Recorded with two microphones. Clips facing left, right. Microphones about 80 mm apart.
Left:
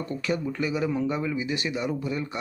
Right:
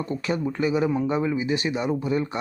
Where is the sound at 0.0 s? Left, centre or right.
Right.